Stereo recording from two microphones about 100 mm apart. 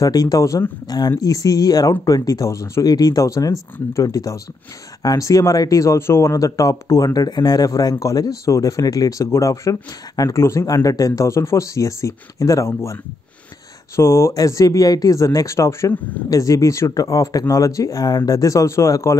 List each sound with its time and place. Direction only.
0.0 s speech: 40° left (ahead or behind)
7.2 s speech: 40° left (ahead or behind)
15.9 s speech: 15° left (ahead or behind)
16.3 s speech: 35° left (ahead or behind)